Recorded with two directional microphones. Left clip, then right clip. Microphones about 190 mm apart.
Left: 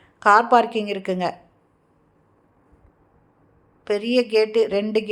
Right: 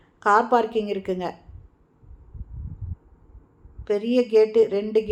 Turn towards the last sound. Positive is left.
turn(degrees=30)  # may be behind; listen again after turning